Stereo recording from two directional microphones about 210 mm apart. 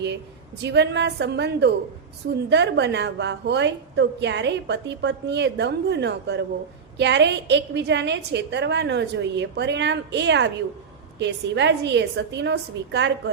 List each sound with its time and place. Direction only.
0.6 s a woman's voice: 55° right (ahead or behind)